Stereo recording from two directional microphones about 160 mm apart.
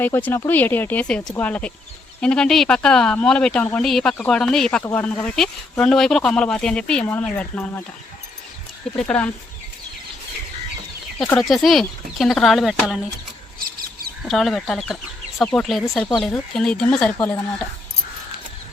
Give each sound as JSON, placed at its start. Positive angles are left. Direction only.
{"t": 0.0, "sound": "speech", "side_deg": 10}
{"t": 9.0, "sound": "speech", "side_deg": 10}
{"t": 11.3, "sound": "speech", "side_deg": 0}
{"t": 13.6, "sound": "a sound", "side_deg": -65}
{"t": 14.2, "sound": "speech", "side_deg": 0}